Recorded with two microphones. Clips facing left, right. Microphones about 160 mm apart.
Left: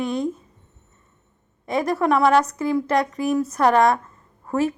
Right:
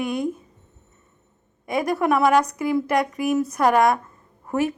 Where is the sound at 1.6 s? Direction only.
15° right (ahead or behind).